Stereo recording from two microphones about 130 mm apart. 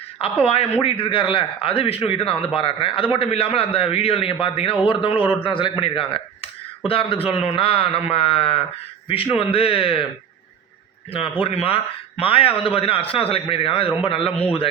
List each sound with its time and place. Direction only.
0.4 s a man's voice: 50° left (ahead or behind)
11.1 s a man's voice: 45° left (ahead or behind)